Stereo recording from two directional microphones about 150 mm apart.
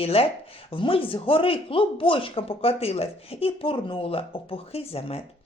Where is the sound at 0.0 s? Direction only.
40° left (ahead or behind).